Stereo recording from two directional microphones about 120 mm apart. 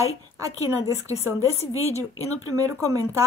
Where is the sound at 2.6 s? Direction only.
25° right (ahead or behind).